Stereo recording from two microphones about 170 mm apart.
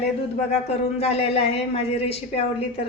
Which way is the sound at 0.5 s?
40° left (ahead or behind).